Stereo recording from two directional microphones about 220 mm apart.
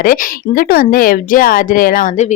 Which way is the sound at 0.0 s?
40° left (ahead or behind).